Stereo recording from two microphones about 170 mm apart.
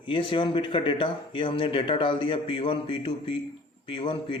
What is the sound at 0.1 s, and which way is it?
A man's voice, 30° left (ahead or behind).